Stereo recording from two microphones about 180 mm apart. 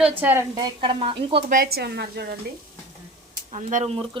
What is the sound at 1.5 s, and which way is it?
Speech, 55° right (ahead or behind).